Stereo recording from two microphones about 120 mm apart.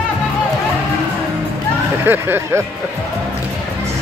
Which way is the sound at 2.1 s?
20° right (ahead or behind).